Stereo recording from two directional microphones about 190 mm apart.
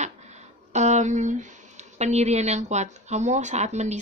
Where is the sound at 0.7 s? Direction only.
40° right (ahead or behind).